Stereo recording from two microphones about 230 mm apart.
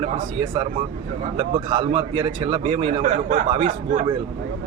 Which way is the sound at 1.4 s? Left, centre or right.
Right.